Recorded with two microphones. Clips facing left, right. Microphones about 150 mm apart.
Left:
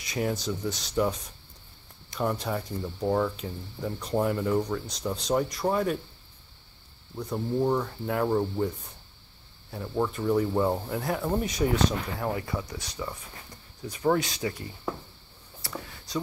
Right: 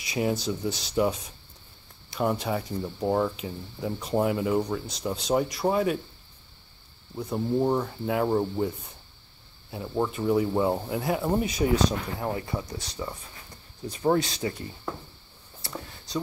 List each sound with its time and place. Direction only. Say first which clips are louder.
0.1 s speech: right 2 dB; 10° right (ahead or behind)
0.4 s speech: right 2 dB; 30° right (ahead or behind)
0.8 s speech: right 2 dB; 15° right (ahead or behind)
2.1 s speech: right 2 dB; 10° right (ahead or behind)
7.2 s speech: right 2 dB; 10° right (ahead or behind)
12.4 s speech: right 1 dB; 25° right (ahead or behind)
15.6 s a sound: even; 25° right (ahead or behind)